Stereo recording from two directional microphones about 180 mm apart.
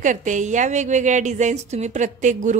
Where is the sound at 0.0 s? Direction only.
45° right (ahead or behind).